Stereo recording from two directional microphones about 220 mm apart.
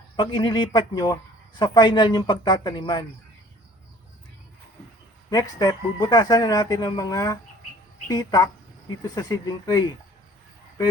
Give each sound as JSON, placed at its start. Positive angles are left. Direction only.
{"t": 0.2, "sound": "speech", "side_deg": 20}
{"t": 5.3, "sound": "speech", "side_deg": 15}